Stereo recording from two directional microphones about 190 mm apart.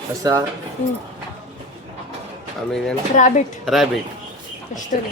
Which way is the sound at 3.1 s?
40° left (ahead or behind).